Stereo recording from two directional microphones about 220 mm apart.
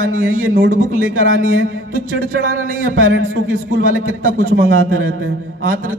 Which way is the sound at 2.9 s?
70° right (ahead or behind).